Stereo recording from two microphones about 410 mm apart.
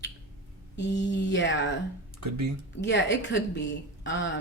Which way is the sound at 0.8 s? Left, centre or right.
Left.